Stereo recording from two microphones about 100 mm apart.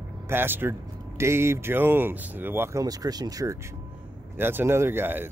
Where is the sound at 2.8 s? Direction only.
40° right (ahead or behind).